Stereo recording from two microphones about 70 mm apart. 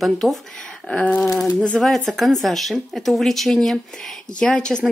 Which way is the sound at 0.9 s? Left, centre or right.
Centre.